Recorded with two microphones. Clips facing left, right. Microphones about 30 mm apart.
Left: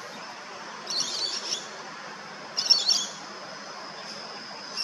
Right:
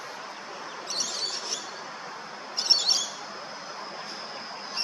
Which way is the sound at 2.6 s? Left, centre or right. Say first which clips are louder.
Even; centre.